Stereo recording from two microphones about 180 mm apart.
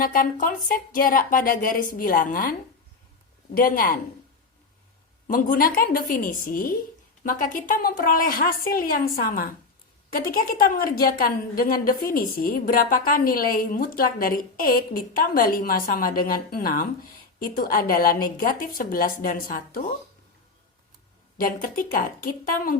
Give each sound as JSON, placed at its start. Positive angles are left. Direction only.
{"t": 0.0, "sound": "a woman's voice", "side_deg": 50}
{"t": 3.6, "sound": "a woman's voice", "side_deg": 50}
{"t": 5.3, "sound": "a woman's voice", "side_deg": 50}
{"t": 21.3, "sound": "a woman's voice", "side_deg": 50}